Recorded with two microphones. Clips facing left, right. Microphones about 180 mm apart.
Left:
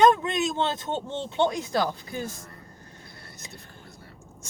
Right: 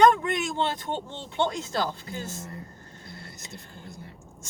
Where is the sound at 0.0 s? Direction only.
20° left (ahead or behind).